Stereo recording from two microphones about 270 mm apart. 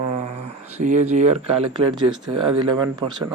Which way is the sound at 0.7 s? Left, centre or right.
Right.